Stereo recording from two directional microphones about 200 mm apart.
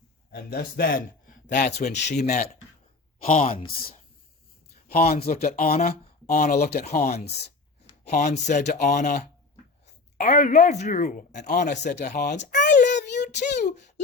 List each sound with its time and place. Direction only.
0.3 s a man's voice: 50° left (ahead or behind)
4.9 s speech: 40° left (ahead or behind)
6.7 s speech: 50° left (ahead or behind)
8.6 s speech: 45° left (ahead or behind)
12.7 s child singing: 60° left (ahead or behind)
13.4 s a sound: 35° left (ahead or behind)